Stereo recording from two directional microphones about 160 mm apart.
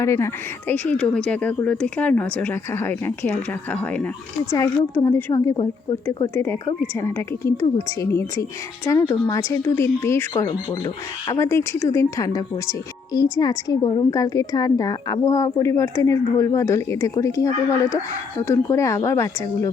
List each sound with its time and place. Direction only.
0.0 s a woman's voice: 15° left (ahead or behind)